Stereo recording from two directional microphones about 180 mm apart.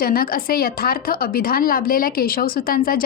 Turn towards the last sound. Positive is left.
turn(degrees=55)  # may be behind; listen again after turning